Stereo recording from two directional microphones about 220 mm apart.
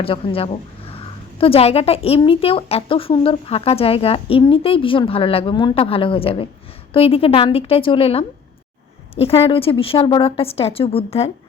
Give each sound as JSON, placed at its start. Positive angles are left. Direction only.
{"t": 0.0, "sound": "a woman's voice", "side_deg": 25}